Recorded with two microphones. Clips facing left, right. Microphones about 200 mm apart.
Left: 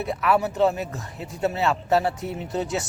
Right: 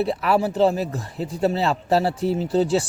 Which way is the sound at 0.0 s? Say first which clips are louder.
Right 2 dB; 35° right (ahead or behind).